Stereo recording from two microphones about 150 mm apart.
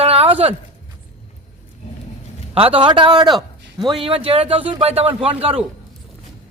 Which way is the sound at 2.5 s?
35° right (ahead or behind).